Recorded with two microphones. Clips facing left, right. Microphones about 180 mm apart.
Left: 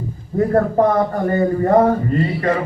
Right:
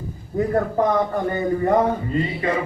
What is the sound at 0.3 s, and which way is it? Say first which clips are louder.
Speech: left 5 dB; 45° left (ahead or behind).